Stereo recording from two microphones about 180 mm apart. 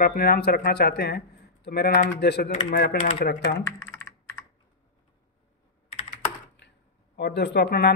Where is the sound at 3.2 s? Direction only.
60° left (ahead or behind).